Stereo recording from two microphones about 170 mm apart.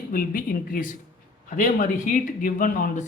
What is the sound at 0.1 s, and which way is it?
Speech, 55° left (ahead or behind).